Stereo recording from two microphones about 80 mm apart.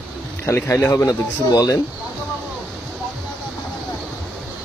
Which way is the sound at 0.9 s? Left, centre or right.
Left.